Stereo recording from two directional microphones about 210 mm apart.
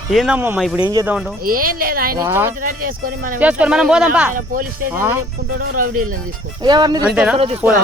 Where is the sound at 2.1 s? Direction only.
10° right (ahead or behind).